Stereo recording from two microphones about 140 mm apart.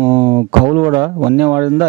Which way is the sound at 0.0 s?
20° right (ahead or behind).